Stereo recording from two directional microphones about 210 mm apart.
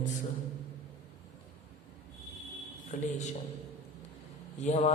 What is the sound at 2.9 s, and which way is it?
Mantra, 35° left (ahead or behind).